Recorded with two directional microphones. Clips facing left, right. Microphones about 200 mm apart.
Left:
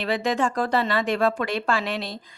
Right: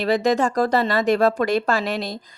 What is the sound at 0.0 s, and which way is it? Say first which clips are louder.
Speech: right 5 dB; 40° right (ahead or behind).